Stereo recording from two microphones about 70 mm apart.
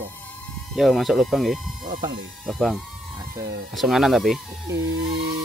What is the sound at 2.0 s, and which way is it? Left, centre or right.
Speech, right.